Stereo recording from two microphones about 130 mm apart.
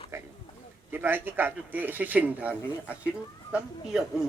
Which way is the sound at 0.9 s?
15° right (ahead or behind).